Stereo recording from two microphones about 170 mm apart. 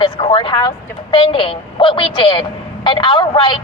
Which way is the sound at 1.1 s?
30° left (ahead or behind).